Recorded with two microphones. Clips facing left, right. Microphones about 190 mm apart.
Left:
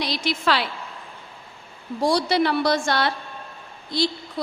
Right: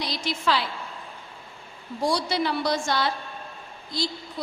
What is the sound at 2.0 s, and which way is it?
A woman's voice, 70° left (ahead or behind).